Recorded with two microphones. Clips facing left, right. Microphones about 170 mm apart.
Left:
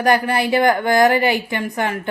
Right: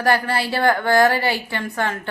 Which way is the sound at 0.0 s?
15° left (ahead or behind).